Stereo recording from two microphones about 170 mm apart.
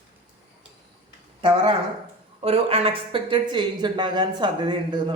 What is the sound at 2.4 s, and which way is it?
Speech, 35° right (ahead or behind).